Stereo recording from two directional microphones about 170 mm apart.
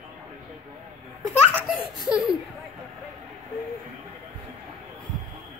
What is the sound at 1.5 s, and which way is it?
Speech, 5° right (ahead or behind).